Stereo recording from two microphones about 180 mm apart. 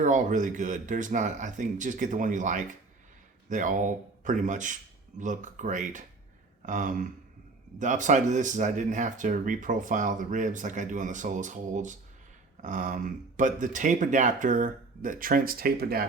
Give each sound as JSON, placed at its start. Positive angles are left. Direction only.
{"t": 0.0, "sound": "speech", "side_deg": -45}